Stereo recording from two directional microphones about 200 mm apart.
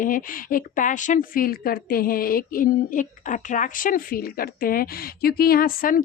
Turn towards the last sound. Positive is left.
turn(degrees=45)  # may be behind; listen again after turning